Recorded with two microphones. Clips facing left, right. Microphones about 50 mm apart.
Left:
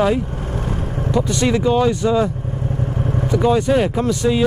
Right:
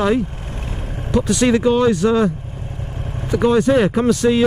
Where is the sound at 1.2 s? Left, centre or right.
Centre.